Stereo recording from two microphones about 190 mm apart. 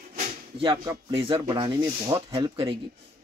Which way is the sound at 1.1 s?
30° right (ahead or behind).